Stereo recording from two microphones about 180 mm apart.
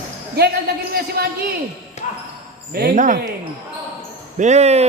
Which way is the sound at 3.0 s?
45° right (ahead or behind).